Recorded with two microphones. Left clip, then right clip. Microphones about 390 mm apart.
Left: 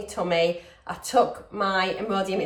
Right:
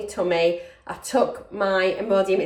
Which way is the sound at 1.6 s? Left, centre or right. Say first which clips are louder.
Right 3 dB; centre.